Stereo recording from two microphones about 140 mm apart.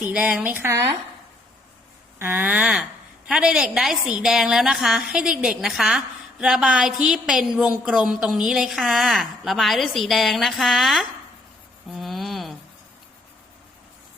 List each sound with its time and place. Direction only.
0.1 s a woman's voice: 5° right (ahead or behind)
0.6 s speech: 15° right (ahead or behind)
2.1 s a woman's voice: 15° right (ahead or behind)
11.9 s music: centre (ahead or behind)